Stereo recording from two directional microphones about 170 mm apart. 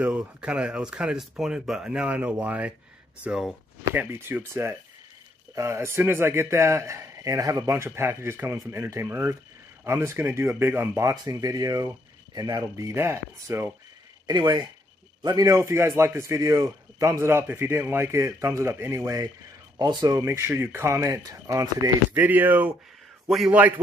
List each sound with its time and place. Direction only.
0.0 s a man's voice: 5° right (ahead or behind)
14.2 s a man's voice: 25° right (ahead or behind); by 23.7 s 5° right (ahead or behind)